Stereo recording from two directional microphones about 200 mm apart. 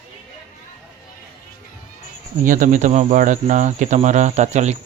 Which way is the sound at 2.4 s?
40° right (ahead or behind).